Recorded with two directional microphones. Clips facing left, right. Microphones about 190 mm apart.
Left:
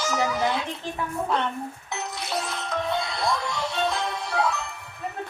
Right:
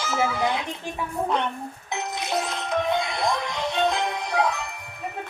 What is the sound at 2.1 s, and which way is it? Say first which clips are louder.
Music: right 4 dB; 20° right (ahead or behind).